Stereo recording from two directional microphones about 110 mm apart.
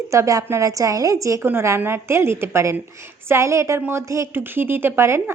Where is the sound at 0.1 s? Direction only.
30° right (ahead or behind).